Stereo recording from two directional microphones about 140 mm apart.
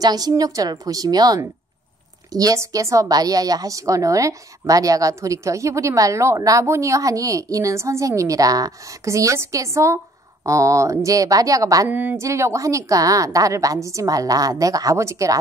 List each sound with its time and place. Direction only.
0.0 s speech: 25° right (ahead or behind)
11.9 s speech: 10° right (ahead or behind)